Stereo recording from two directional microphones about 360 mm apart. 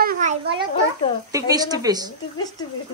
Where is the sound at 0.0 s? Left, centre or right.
Right.